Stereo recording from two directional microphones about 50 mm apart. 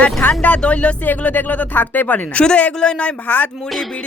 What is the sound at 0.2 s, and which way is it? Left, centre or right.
Speech, left.